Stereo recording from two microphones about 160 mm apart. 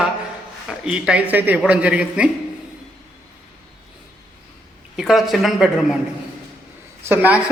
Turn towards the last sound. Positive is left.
turn(degrees=-10)  # may be behind; listen again after turning